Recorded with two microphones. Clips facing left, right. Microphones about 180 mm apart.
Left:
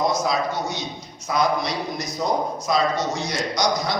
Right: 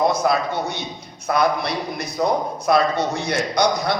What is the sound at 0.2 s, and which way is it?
A man's voice, 60° right (ahead or behind).